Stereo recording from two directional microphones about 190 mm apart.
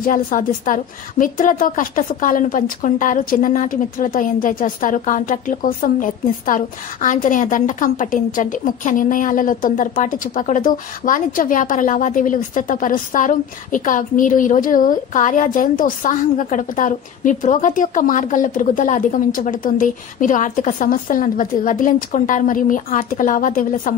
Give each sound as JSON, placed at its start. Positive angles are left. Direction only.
{"t": 0.0, "sound": "a woman's voice", "side_deg": 45}